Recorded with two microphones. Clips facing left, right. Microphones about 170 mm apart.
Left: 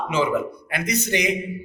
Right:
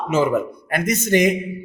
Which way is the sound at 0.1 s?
45° right (ahead or behind).